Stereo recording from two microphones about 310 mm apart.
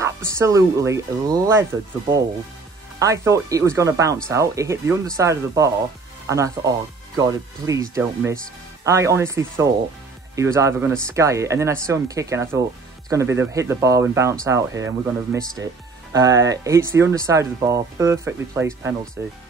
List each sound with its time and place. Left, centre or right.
0.0 s speech: centre